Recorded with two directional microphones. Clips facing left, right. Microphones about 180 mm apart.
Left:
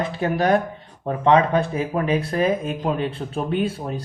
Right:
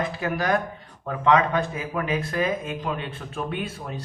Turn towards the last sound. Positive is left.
turn(degrees=30)  # may be behind; listen again after turning